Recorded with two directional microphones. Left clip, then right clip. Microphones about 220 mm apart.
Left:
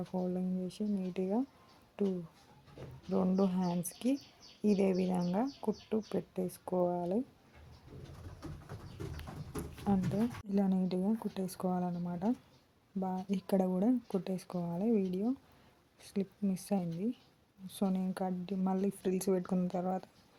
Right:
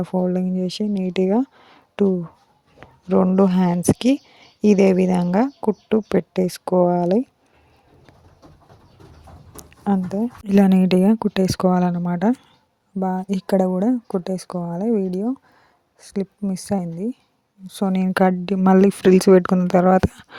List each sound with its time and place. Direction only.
0.0 s speech: 45° right (ahead or behind)
9.9 s speech: 35° right (ahead or behind)